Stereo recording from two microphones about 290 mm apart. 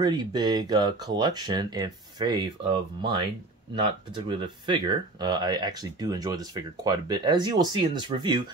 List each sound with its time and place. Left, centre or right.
0.0 s speech: centre